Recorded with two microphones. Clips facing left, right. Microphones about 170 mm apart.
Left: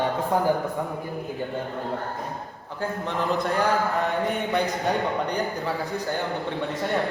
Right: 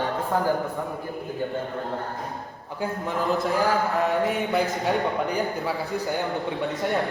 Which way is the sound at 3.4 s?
Centre (ahead or behind).